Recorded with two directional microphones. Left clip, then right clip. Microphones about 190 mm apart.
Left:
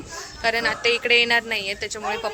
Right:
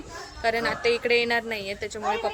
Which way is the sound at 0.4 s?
5° right (ahead or behind).